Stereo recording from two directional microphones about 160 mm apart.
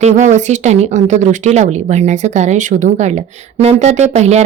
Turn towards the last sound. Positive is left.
turn(degrees=-45)  # may be behind; listen again after turning